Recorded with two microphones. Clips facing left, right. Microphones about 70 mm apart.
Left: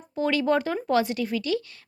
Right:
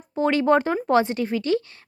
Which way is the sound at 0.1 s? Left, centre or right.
Right.